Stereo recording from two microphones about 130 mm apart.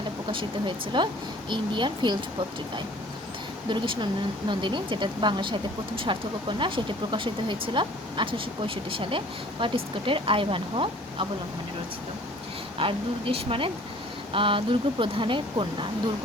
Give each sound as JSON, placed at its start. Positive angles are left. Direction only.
{"t": 0.9, "sound": "speech", "side_deg": -35}
{"t": 3.7, "sound": "speech", "side_deg": -35}
{"t": 12.8, "sound": "speech", "side_deg": -45}